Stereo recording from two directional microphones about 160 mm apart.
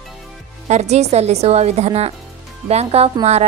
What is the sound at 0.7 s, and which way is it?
A woman's voice, 45° right (ahead or behind).